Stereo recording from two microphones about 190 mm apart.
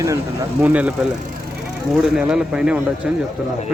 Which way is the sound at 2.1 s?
5° right (ahead or behind).